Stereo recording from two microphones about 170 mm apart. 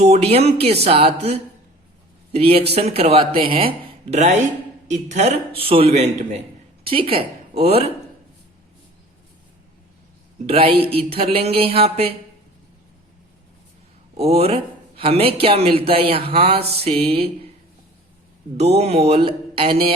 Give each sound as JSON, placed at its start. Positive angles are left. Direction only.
{"t": 0.0, "sound": "a woman's voice", "side_deg": -35}
{"t": 10.5, "sound": "speech", "side_deg": -35}
{"t": 14.2, "sound": "speech", "side_deg": -35}
{"t": 18.5, "sound": "speech", "side_deg": -35}